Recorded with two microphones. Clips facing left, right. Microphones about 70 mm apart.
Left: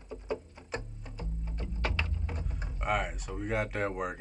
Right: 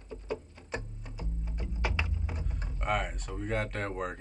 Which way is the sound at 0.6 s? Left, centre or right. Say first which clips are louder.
Right 1 dB; centre.